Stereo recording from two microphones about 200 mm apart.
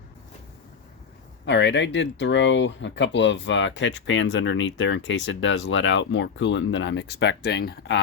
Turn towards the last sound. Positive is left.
turn(degrees=55)  # may be behind; listen again after turning